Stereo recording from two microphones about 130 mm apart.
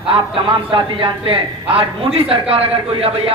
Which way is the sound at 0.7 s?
40° right (ahead or behind).